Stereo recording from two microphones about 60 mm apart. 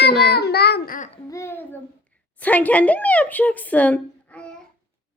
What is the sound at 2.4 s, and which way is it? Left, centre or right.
A woman's voice, left.